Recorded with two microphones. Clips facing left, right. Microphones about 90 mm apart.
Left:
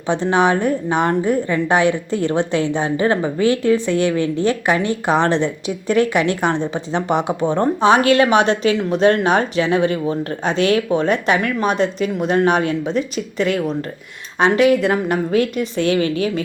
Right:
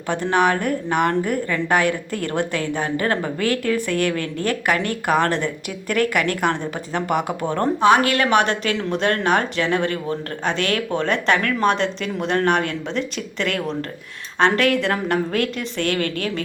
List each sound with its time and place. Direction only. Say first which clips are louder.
0.1 s a woman's voice: left 3 dB; 20° left (ahead or behind)